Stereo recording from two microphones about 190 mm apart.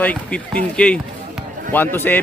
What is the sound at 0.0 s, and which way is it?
Speech, 5° left (ahead or behind).